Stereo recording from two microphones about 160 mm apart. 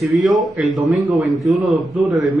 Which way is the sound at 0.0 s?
Centre (ahead or behind).